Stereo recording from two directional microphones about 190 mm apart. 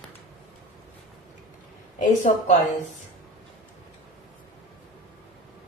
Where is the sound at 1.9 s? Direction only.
40° left (ahead or behind).